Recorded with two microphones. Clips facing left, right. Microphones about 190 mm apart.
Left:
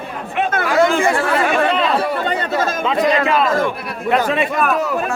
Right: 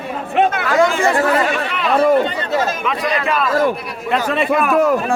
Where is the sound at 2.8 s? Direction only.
25° left (ahead or behind).